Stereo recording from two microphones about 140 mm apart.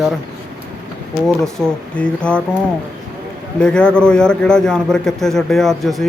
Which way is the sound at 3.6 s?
5° left (ahead or behind).